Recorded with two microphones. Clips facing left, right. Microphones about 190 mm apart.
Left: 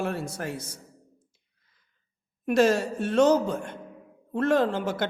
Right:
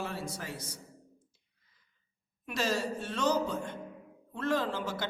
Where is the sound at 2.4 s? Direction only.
55° left (ahead or behind).